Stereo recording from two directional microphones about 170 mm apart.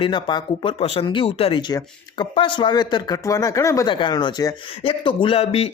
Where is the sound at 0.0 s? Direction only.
25° left (ahead or behind).